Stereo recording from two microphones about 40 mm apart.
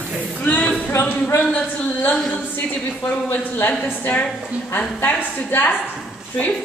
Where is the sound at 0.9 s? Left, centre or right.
Left.